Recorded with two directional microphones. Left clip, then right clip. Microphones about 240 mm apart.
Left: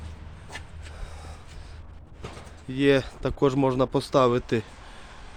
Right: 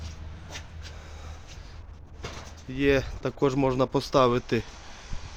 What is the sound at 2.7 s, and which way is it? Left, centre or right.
Speech, left.